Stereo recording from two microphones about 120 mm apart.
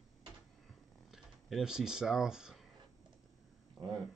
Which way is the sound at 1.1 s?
Centre (ahead or behind).